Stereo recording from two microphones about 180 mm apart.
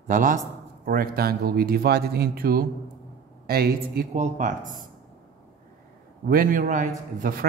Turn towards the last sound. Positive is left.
turn(degrees=-50)  # may be behind; listen again after turning